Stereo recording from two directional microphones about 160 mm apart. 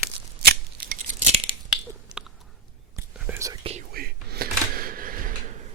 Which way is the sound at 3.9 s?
70° right (ahead or behind).